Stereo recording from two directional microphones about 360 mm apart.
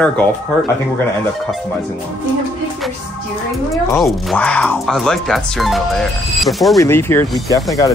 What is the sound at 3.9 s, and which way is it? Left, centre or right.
Speech, centre.